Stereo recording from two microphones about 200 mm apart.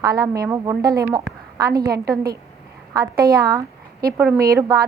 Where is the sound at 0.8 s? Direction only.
50° right (ahead or behind).